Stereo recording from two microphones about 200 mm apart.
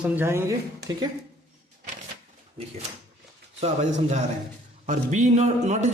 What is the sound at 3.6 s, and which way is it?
A man's voice, 35° right (ahead or behind).